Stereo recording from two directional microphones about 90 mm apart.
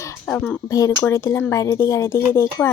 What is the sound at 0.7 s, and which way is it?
A woman's voice, 40° left (ahead or behind).